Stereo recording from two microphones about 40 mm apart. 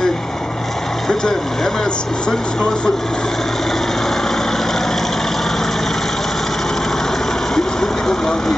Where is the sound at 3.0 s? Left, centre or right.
Centre.